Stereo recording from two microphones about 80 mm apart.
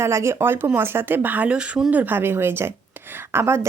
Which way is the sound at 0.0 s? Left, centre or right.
Right.